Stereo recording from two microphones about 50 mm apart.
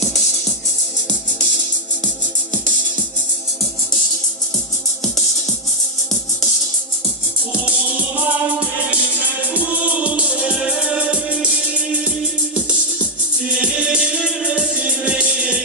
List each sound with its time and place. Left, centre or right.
7.5 s music: right